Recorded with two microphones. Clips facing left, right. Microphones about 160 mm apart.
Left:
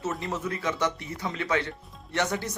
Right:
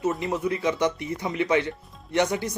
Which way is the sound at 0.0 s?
15° right (ahead or behind).